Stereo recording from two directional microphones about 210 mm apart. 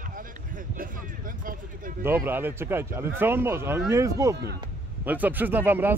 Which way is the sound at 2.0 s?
10° right (ahead or behind).